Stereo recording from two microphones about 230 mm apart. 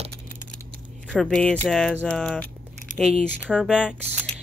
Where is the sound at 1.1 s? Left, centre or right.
Centre.